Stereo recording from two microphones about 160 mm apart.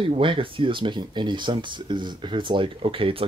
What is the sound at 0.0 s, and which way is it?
Speech, 30° right (ahead or behind).